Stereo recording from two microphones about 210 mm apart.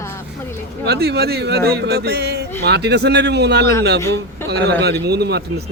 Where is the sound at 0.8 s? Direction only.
50° right (ahead or behind).